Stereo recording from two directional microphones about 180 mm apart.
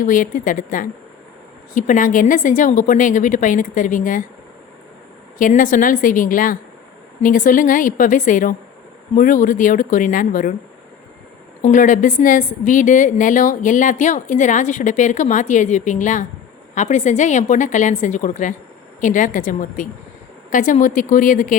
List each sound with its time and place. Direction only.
0.0 s a woman's voice: 45° left (ahead or behind)
5.4 s a woman's voice: 45° left (ahead or behind)
11.6 s a woman's voice: 45° left (ahead or behind)